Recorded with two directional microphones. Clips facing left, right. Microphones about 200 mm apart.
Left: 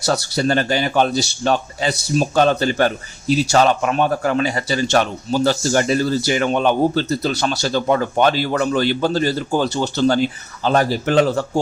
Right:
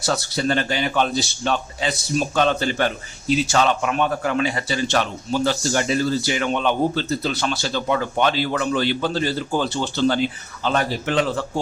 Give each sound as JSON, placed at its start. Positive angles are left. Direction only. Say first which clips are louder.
{"t": 0.0, "sound": "a man's voice", "louder": "left 3 dB", "side_deg": 40}